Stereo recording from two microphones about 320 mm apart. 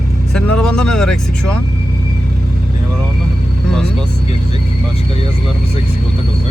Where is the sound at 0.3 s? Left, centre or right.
Centre.